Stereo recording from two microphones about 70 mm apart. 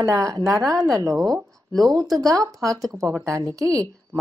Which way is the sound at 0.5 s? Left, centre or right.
Centre.